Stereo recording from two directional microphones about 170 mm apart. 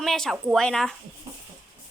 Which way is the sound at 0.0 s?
Centre (ahead or behind).